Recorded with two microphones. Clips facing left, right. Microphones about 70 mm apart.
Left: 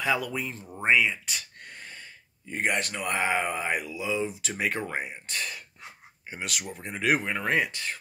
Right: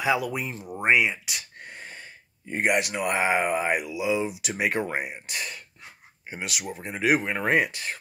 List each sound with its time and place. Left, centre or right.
0.0 s speech: centre
2.5 s speech: centre
7.3 s speech: centre